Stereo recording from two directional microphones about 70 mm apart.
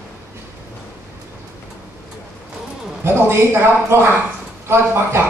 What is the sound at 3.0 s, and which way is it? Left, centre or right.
Speech, right.